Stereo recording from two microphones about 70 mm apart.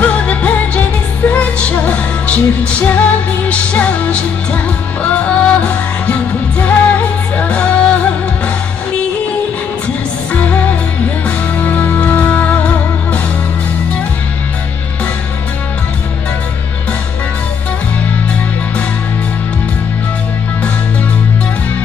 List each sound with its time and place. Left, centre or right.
0.0 s music: centre
10.3 s music: left